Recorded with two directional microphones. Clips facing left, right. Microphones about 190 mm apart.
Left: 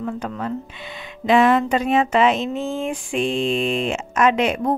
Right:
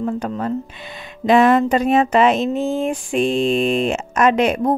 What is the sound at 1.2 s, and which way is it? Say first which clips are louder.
Speech: right 3 dB; 40° right (ahead or behind).